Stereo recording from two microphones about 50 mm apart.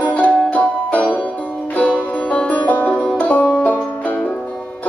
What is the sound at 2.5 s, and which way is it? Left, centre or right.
Music, left.